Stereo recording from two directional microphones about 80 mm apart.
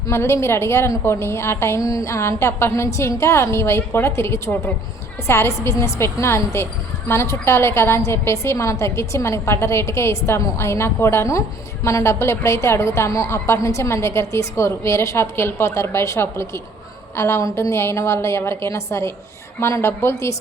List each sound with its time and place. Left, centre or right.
0.1 s a woman's voice: left